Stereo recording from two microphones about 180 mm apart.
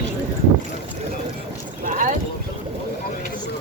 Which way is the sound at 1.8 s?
50° right (ahead or behind).